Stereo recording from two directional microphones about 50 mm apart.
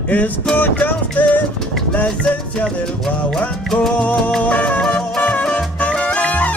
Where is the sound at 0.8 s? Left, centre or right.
Left.